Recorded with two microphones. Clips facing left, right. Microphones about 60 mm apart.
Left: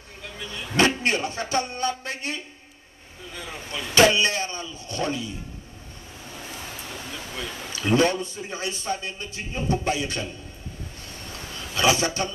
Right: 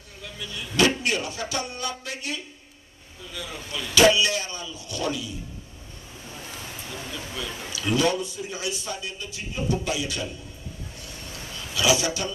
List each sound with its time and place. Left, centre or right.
0.4 s a man's voice: left
7.3 s a man's voice: left
11.3 s a sound: left